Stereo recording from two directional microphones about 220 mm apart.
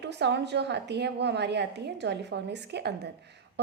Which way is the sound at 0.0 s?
50° right (ahead or behind).